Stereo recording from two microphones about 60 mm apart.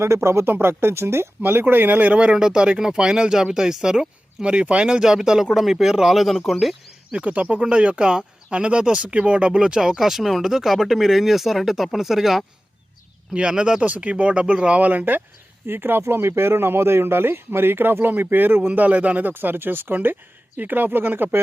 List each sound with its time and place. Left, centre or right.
0.0 s speech: right; by 6.7 s centre
7.1 s speech: right; by 12.5 s centre
13.3 s speech: centre; by 21.4 s right